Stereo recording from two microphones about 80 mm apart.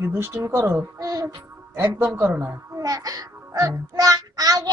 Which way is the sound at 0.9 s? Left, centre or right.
Right.